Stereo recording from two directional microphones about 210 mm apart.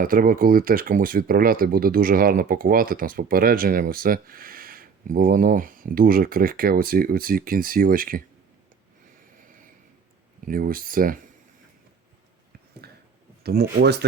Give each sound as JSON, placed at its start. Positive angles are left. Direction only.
{"t": 0.0, "sound": "speech", "side_deg": -45}
{"t": 10.5, "sound": "speech", "side_deg": -40}
{"t": 12.8, "sound": "a sound", "side_deg": -50}
{"t": 13.4, "sound": "speech", "side_deg": -50}